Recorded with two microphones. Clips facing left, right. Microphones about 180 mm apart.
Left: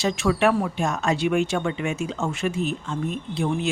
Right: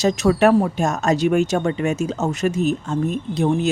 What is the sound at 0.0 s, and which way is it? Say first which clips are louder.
Speech: right 5 dB; 40° right (ahead or behind).